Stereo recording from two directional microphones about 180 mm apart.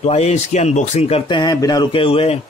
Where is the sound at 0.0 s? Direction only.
35° left (ahead or behind).